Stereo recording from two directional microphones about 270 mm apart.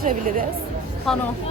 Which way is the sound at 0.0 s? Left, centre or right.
Right.